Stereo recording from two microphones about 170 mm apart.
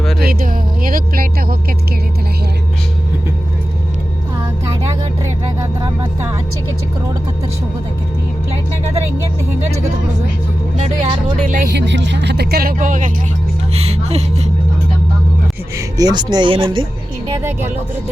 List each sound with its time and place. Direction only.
0.2 s a sound: 60° right (ahead or behind)
10.8 s speech: 35° right (ahead or behind)
11.7 s music: 90° right; by 13.1 s 50° right (ahead or behind)
13.7 s speech: 35° right (ahead or behind)
16.0 s speech: 25° right (ahead or behind)